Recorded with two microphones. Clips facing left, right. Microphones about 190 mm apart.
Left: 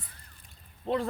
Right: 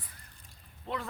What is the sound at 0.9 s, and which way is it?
Speech, 35° left (ahead or behind).